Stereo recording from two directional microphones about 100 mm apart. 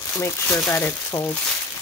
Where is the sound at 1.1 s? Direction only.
45° left (ahead or behind).